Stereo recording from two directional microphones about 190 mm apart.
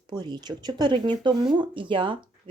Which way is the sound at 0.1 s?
25° right (ahead or behind).